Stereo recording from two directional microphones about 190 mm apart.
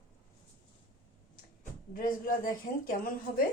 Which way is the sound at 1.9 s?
45° left (ahead or behind).